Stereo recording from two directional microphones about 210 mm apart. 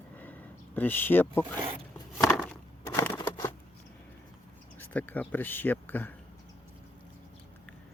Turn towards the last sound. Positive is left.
turn(degrees=10)  # may be behind; listen again after turning